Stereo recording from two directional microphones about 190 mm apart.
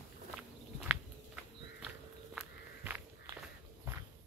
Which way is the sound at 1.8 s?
Centre (ahead or behind).